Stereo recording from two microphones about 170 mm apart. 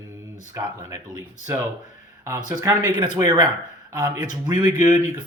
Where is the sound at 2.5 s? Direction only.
20° right (ahead or behind).